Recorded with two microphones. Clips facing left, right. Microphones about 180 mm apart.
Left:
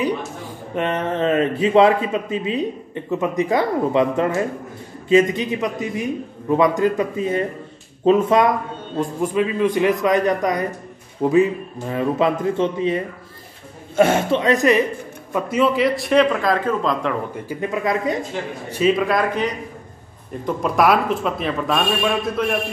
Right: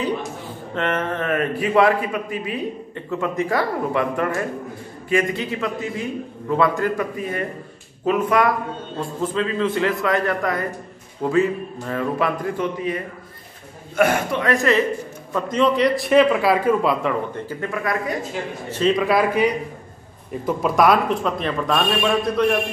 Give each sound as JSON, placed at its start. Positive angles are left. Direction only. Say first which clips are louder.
{"t": 0.7, "sound": "a man's voice", "louder": "left 2 dB", "side_deg": 15}
{"t": 17.3, "sound": "a man's voice", "louder": "left 2 dB", "side_deg": 15}
{"t": 18.7, "sound": "a man's voice", "louder": "left 1 dB", "side_deg": 5}